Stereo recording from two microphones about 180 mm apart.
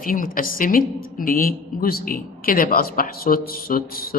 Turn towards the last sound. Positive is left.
turn(degrees=55)  # may be behind; listen again after turning